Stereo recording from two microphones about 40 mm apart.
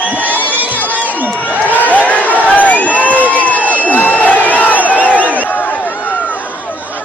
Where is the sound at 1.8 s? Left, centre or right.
Left.